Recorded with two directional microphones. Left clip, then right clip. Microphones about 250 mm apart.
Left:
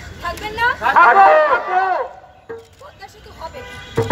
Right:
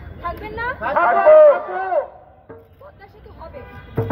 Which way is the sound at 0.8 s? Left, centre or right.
Right.